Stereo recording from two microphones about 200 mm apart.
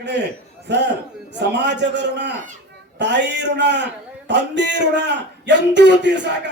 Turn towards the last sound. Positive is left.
turn(degrees=-60)  # may be behind; listen again after turning